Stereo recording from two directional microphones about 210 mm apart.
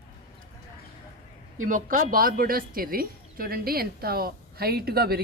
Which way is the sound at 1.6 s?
40° right (ahead or behind).